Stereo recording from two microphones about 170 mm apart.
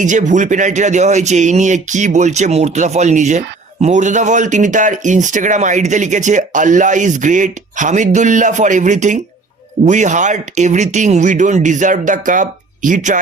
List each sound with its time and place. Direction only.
0.0 s speech: 45° right (ahead or behind)